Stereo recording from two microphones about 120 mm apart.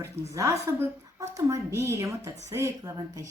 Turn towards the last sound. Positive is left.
turn(degrees=-30)  # may be behind; listen again after turning